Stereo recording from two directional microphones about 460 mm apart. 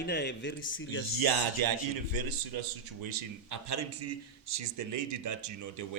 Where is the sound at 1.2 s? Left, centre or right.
Right.